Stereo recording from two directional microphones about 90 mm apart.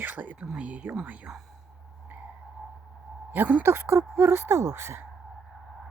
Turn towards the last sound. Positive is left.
turn(degrees=-30)  # may be behind; listen again after turning